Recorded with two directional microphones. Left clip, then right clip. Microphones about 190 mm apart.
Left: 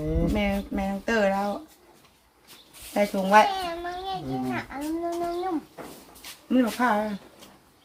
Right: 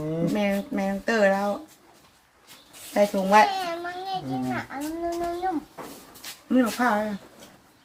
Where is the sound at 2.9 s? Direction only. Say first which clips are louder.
Right 1 dB; 15° right (ahead or behind).